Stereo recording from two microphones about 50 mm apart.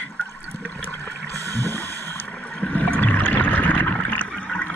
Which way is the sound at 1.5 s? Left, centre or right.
Left.